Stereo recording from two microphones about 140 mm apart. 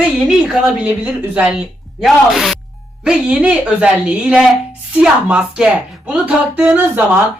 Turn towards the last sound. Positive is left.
turn(degrees=-10)  # may be behind; listen again after turning